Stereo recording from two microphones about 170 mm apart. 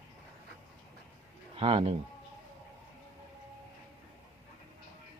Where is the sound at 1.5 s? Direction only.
35° right (ahead or behind).